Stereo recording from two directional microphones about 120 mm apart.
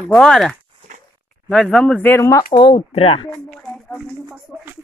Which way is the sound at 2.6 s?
55° left (ahead or behind).